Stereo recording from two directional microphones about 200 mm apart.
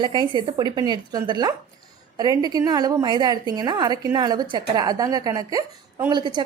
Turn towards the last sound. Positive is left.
turn(degrees=-20)  # may be behind; listen again after turning